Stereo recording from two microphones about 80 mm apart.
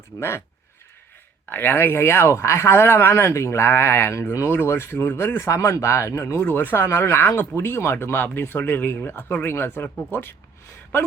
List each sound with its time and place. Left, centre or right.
0.2 s speech: left
1.5 s speech: left
6.4 s speech: left